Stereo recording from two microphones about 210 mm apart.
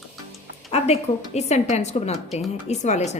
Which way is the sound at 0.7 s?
30° left (ahead or behind).